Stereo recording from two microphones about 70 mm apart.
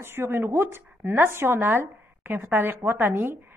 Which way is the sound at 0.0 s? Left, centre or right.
Right.